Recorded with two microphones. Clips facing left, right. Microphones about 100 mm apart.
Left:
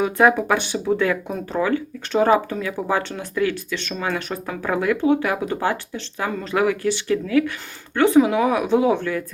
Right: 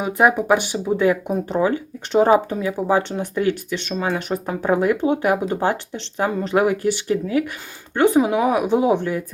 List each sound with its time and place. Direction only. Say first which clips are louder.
0.0 s speech: left 1 dB; 15° right (ahead or behind)